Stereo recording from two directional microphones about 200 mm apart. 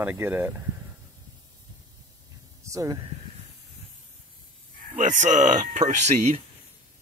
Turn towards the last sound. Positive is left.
turn(degrees=-35)  # may be behind; listen again after turning